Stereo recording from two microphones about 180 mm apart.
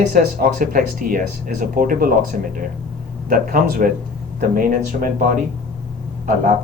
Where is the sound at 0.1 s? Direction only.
50° right (ahead or behind).